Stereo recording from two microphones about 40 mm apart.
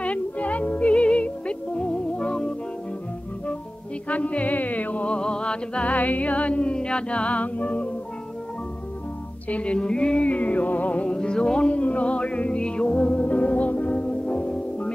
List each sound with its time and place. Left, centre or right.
0.0 s music: left
4.1 s music: left
5.1 s music: left
5.9 s music: left
9.5 s music: left
11.1 s music: left
13.2 s music: left